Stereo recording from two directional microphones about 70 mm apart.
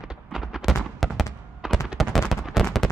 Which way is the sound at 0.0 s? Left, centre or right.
Centre.